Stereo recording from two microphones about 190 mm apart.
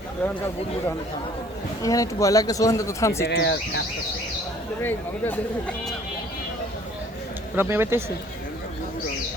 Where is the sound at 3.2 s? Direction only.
60° left (ahead or behind).